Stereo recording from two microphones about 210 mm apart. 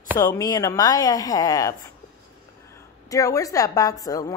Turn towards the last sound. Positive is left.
turn(degrees=15)  # may be behind; listen again after turning